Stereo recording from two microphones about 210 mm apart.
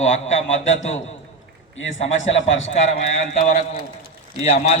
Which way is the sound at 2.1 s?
65° left (ahead or behind).